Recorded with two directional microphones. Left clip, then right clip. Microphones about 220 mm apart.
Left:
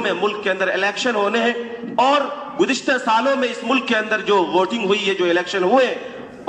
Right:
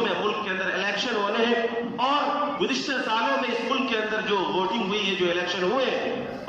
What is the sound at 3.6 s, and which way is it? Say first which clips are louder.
A man's voice: left 6 dB; 45° left (ahead or behind).